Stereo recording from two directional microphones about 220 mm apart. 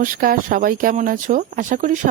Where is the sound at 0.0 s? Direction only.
40° right (ahead or behind).